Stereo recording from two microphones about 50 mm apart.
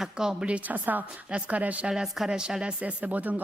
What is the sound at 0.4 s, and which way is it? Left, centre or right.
A woman's voice, right.